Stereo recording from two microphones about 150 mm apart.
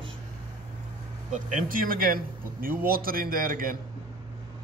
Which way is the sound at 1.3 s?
60° right (ahead or behind).